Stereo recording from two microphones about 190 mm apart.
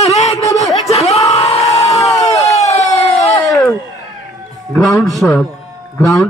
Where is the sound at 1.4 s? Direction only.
30° left (ahead or behind).